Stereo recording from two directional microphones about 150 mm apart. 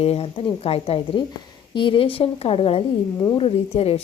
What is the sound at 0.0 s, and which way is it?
A woman's voice, 40° left (ahead or behind).